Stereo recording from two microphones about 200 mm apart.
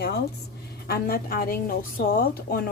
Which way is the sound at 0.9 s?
50° left (ahead or behind).